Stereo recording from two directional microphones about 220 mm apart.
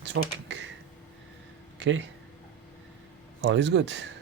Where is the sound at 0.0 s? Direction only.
55° right (ahead or behind).